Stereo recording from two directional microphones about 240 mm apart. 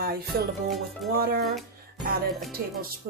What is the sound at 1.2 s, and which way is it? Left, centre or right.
Speech, right.